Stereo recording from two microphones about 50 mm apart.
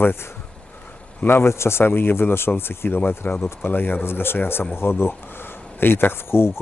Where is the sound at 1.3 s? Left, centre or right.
Left.